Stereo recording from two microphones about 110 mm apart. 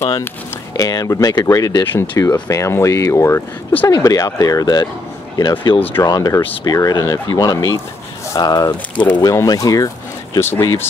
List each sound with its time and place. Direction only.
0.0 s speech: 25° left (ahead or behind)
3.9 s speech: 35° left (ahead or behind)
10.4 s speech: 20° left (ahead or behind)